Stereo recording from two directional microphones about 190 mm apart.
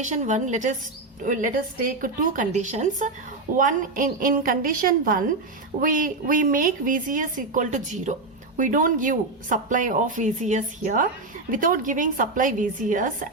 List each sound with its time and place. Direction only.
0.0 s speech: 40° right (ahead or behind)